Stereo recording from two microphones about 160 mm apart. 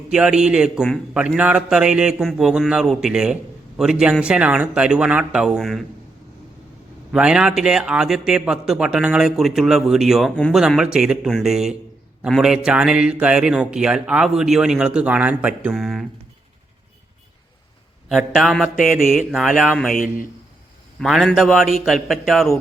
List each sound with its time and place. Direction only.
0.1 s speech: 5° right (ahead or behind)
7.1 s speech: 5° right (ahead or behind)
18.1 s speech: 5° right (ahead or behind)
19.9 s a man's voice: 60° left (ahead or behind)
21.0 s speech: centre (ahead or behind)